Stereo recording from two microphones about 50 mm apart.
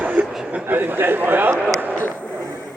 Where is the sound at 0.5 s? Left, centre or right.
Right.